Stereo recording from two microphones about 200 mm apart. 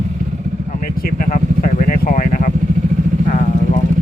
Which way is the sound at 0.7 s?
45° left (ahead or behind).